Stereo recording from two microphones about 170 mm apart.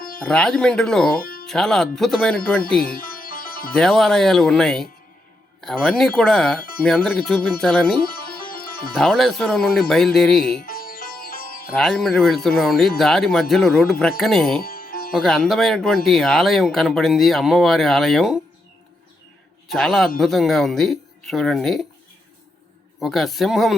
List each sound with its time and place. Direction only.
0.2 s speech: 5° left (ahead or behind)
1.2 s music: 55° left (ahead or behind)
1.5 s speech: 5° left (ahead or behind)
3.0 s music: 55° left (ahead or behind)
3.8 s speech: 5° left (ahead or behind)
8.0 s music: 60° left (ahead or behind)
8.9 s speech: 5° left (ahead or behind)
10.7 s sitar: 60° left (ahead or behind)
11.7 s speech: 5° left (ahead or behind)
14.6 s music: 60° left (ahead or behind)
15.1 s speech: centre (ahead or behind)
19.6 s a man's voice: centre (ahead or behind)
23.0 s speech: centre (ahead or behind)